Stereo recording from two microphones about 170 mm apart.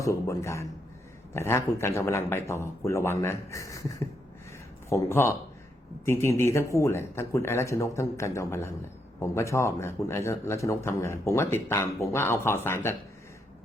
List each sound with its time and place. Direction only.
0.0 s speech: 20° left (ahead or behind)